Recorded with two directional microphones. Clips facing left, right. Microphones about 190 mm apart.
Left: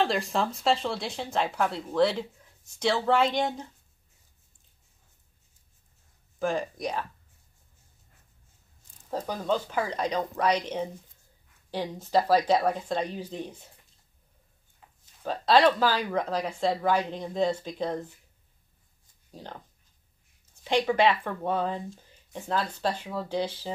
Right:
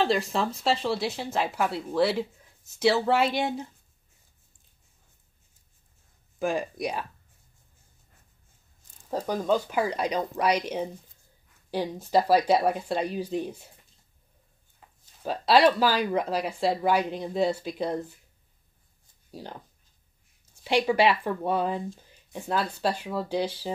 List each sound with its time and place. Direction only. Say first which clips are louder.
0.0 s speech: right 1 dB; centre (ahead or behind)
6.4 s speech: right 1 dB; 10° right (ahead or behind)
9.1 s speech: right 3 dB; 10° right (ahead or behind)
15.2 s speech: right 1 dB; 10° right (ahead or behind)
19.4 s speech: right 2 dB; 10° right (ahead or behind)
20.6 s speech: right 1 dB; 10° right (ahead or behind)